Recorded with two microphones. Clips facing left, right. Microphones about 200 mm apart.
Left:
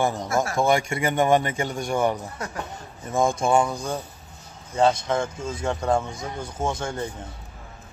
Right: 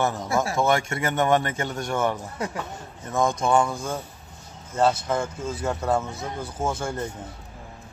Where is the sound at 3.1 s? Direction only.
25° left (ahead or behind).